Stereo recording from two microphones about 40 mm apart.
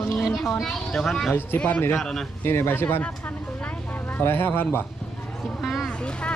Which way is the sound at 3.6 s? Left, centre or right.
Left.